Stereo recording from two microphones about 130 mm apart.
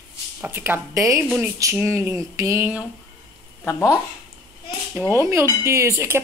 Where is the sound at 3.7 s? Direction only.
20° left (ahead or behind).